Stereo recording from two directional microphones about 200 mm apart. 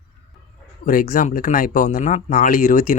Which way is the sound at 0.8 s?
45° left (ahead or behind).